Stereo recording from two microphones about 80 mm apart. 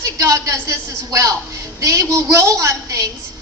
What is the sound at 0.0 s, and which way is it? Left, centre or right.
A woman's voice, right.